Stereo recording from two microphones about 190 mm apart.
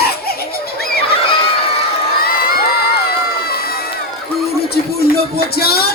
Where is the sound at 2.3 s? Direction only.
55° left (ahead or behind).